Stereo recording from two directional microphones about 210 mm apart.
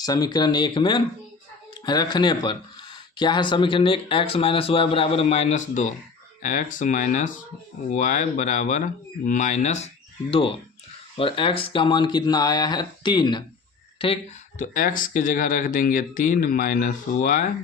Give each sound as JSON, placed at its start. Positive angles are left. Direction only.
{"t": 0.0, "sound": "speech", "side_deg": 20}
{"t": 11.2, "sound": "speech", "side_deg": 25}
{"t": 14.6, "sound": "speech", "side_deg": 40}